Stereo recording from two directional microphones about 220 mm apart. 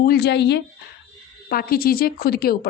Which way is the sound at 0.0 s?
45° left (ahead or behind).